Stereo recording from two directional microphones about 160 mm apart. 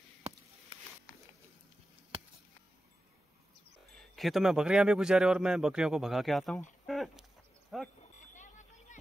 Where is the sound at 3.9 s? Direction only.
Centre (ahead or behind).